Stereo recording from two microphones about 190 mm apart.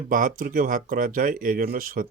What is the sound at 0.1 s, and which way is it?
Speech, 45° right (ahead or behind).